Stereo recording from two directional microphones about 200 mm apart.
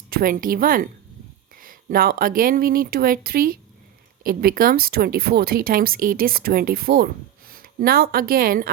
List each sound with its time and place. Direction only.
0.1 s speech: 45° right (ahead or behind)